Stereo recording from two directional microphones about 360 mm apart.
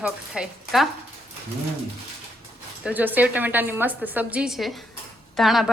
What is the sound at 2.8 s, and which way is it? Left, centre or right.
A woman's voice, centre.